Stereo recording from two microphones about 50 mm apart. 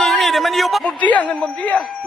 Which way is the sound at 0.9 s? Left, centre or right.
Left.